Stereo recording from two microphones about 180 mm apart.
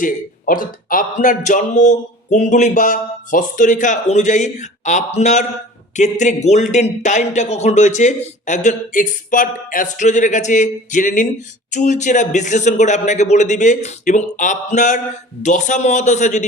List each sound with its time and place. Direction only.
0.0 s speech: 50° left (ahead or behind)